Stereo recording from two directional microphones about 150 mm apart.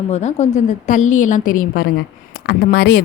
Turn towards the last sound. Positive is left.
turn(degrees=90)